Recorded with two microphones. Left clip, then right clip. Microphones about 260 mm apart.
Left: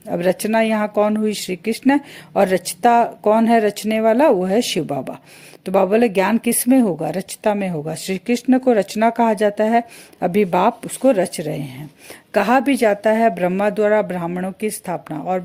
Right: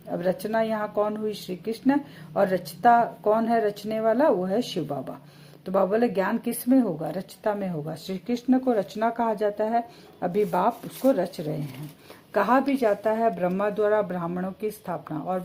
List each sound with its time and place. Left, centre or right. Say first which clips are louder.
0.1 s speech: left 8 dB; left